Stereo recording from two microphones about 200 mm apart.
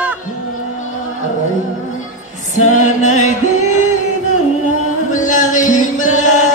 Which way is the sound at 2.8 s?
35° left (ahead or behind).